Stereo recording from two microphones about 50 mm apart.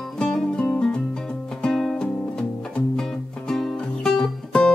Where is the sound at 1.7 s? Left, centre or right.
Centre.